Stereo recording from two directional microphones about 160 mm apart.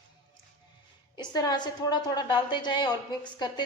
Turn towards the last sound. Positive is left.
turn(degrees=25)  # may be behind; listen again after turning